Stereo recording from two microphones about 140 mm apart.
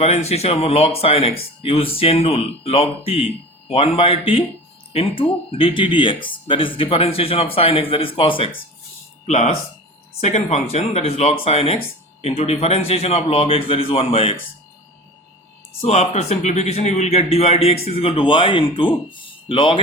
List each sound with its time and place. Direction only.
0.0 s speech: 50° left (ahead or behind)
9.2 s speech: 55° left (ahead or behind)
15.8 s speech: 50° left (ahead or behind)